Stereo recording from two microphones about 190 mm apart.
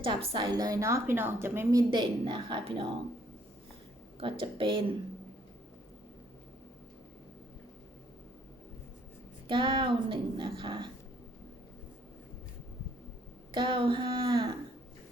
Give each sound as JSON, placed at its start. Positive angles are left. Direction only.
{"t": 0.0, "sound": "a woman's voice", "side_deg": -25}
{"t": 1.9, "sound": "speech", "side_deg": -25}
{"t": 4.2, "sound": "speech", "side_deg": -30}
{"t": 9.5, "sound": "speech", "side_deg": -25}
{"t": 13.5, "sound": "speech", "side_deg": -25}